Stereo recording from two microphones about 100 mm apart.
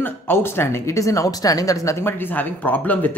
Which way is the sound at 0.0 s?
25° left (ahead or behind).